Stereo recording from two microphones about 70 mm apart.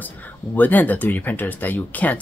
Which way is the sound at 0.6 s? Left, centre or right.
Left.